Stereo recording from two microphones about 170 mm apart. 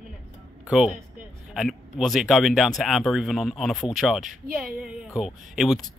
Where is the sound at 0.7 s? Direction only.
5° right (ahead or behind).